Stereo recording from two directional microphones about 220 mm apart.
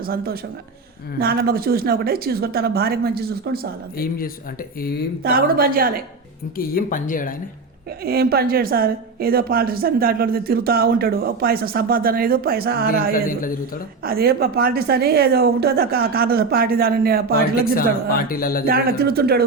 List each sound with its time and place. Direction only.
0.0 s a woman's voice: 45° right (ahead or behind)
3.9 s speech: 40° left (ahead or behind)
5.2 s a woman's voice: 45° right (ahead or behind)
6.6 s speech: 40° left (ahead or behind)
8.0 s a woman's voice: 45° right (ahead or behind)
13.2 s speech: 40° left (ahead or behind)
14.0 s a woman's voice: 45° right (ahead or behind)
18.3 s speech: 40° left (ahead or behind)
18.7 s a woman's voice: 45° right (ahead or behind)